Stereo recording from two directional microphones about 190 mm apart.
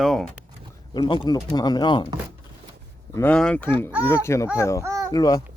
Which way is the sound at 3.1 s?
10° left (ahead or behind).